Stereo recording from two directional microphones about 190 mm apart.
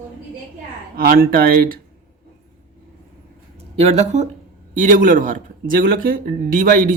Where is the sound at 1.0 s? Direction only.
50° right (ahead or behind).